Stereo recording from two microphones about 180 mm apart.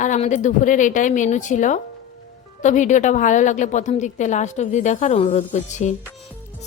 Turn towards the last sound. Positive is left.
turn(degrees=40)  # may be behind; listen again after turning